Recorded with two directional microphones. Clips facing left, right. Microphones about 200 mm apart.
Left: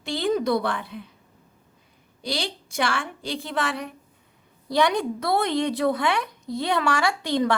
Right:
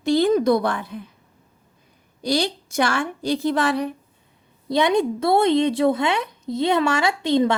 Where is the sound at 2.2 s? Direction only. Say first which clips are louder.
Right 8 dB; 45° right (ahead or behind).